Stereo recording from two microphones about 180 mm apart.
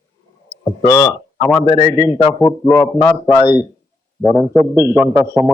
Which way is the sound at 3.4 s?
25° left (ahead or behind).